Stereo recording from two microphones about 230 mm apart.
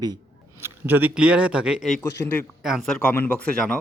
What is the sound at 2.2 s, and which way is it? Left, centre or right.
Speech, centre.